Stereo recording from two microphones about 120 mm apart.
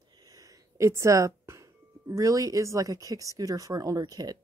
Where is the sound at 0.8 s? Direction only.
25° right (ahead or behind).